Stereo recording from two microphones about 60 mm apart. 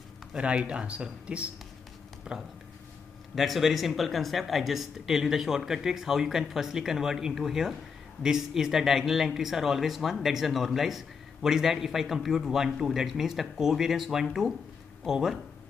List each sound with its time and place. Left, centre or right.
0.4 s speech: centre